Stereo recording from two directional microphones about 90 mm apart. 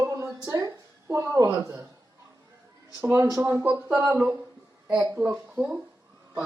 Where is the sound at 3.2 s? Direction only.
35° right (ahead or behind).